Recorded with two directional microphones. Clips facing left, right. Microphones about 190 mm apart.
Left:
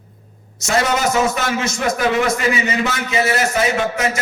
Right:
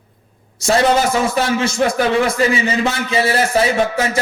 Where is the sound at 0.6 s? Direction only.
30° right (ahead or behind).